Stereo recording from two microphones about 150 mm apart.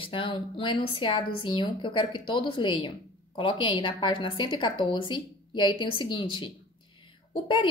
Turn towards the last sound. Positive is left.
turn(degrees=35)  # may be behind; listen again after turning